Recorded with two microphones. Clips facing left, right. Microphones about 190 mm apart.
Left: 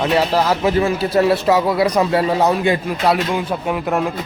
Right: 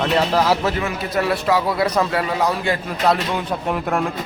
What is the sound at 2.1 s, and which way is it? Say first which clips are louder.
Speech: left 5 dB; 30° left (ahead or behind).